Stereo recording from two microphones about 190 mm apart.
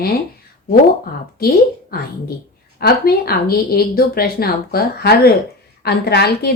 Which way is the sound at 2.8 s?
55° left (ahead or behind).